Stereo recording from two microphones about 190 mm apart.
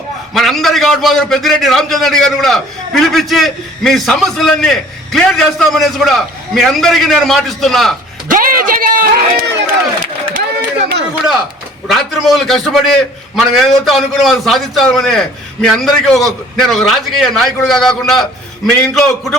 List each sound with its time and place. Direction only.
0.3 s a man's voice: centre (ahead or behind)
8.3 s a man's voice: 45° right (ahead or behind)
10.3 s a sound: 55° right (ahead or behind)
11.9 s a man's voice: centre (ahead or behind)